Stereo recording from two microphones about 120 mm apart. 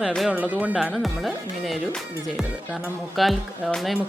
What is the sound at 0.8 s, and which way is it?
Speech, centre (ahead or behind).